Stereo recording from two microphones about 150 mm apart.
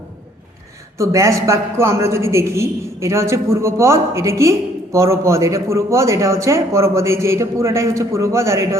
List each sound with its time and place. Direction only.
0.9 s a man's voice: 20° right (ahead or behind)